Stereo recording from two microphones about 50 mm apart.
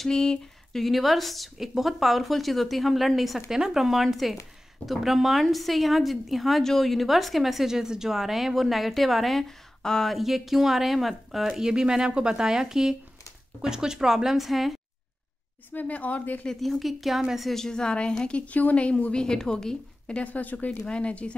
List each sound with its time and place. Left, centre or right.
0.0 s a sound: centre
0.7 s a woman's voice: centre
10.1 s speech: centre
15.7 s speech: left
16.5 s a woman's voice: centre; by 19.2 s left
19.2 s a woman's voice: centre
20.2 s a woman's voice: left
20.8 s a woman's voice: left